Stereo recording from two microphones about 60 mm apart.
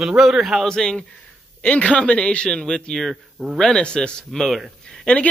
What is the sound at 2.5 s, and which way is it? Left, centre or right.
Speech, centre.